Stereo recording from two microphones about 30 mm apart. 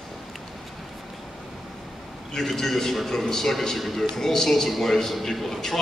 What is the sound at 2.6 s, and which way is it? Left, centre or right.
A man's voice, centre.